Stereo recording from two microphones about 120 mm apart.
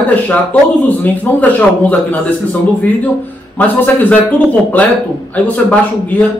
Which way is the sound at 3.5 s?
15° left (ahead or behind).